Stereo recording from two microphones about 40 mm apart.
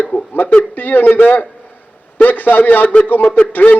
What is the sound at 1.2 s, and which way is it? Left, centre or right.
A man's voice, left.